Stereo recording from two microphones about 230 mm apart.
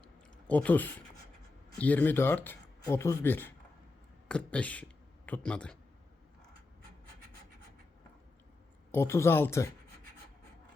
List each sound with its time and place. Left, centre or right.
0.4 s speech: centre
8.9 s speech: centre